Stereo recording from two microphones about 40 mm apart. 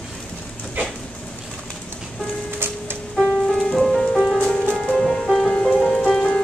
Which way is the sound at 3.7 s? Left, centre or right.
Centre.